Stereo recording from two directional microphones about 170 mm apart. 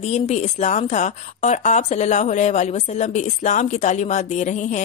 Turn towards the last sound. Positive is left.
turn(degrees=45)  # may be behind; listen again after turning